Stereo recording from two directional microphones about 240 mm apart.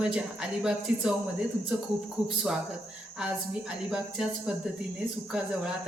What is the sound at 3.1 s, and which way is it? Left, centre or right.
Speech, centre.